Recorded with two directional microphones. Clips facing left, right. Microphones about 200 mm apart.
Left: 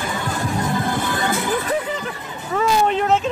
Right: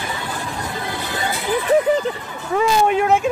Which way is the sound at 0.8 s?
50° left (ahead or behind).